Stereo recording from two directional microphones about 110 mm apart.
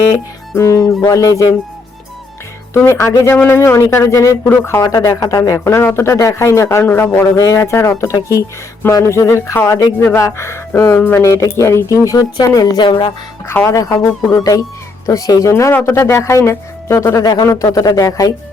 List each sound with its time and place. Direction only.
0.5 s speech: 30° left (ahead or behind)
2.7 s speech: 25° left (ahead or behind)
7.3 s speech: 30° left (ahead or behind); by 13.1 s 50° left (ahead or behind)
13.5 s speech: 25° left (ahead or behind)